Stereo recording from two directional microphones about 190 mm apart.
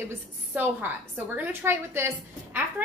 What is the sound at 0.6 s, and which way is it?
A woman's voice, 10° right (ahead or behind).